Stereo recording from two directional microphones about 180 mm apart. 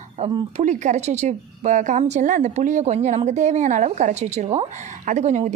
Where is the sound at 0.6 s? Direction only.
45° right (ahead or behind).